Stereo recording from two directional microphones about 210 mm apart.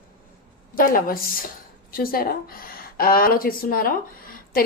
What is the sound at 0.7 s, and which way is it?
A woman's voice, 45° left (ahead or behind).